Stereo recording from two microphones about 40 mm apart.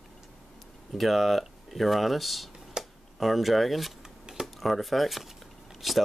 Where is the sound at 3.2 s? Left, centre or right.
Centre.